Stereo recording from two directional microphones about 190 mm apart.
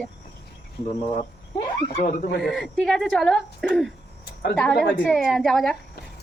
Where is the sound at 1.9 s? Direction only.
45° left (ahead or behind).